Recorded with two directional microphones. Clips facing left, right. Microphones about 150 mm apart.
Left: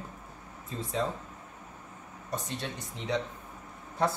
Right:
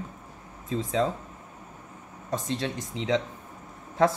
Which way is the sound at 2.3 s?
90° right.